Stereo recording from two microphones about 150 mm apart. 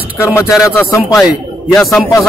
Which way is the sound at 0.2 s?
20° left (ahead or behind).